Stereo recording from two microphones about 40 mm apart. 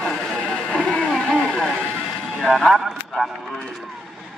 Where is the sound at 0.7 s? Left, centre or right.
Left.